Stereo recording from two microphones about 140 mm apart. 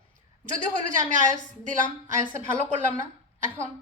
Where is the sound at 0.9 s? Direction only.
65° right (ahead or behind).